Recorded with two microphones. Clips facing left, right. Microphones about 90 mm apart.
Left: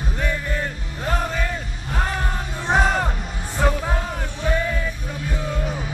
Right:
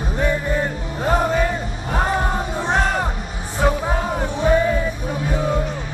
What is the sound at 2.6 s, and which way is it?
Music, centre (ahead or behind).